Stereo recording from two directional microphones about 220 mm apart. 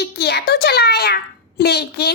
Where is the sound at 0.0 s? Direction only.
50° left (ahead or behind).